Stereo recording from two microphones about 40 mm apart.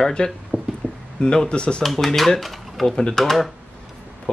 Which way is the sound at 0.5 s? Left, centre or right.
Right.